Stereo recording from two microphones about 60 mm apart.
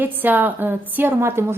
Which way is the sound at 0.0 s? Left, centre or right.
Right.